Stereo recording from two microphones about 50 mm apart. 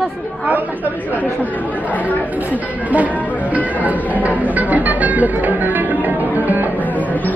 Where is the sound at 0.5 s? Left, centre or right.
Right.